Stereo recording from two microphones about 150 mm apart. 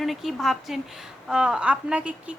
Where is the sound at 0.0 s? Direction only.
Centre (ahead or behind).